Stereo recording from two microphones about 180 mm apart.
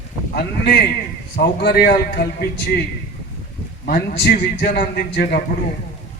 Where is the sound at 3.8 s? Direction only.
60° left (ahead or behind).